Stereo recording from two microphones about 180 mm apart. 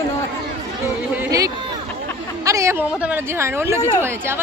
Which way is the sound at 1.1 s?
15° right (ahead or behind).